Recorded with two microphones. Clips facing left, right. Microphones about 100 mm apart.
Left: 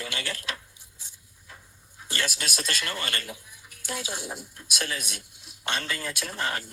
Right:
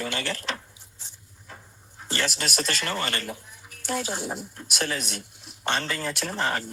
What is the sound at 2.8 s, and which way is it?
Speech, 25° right (ahead or behind).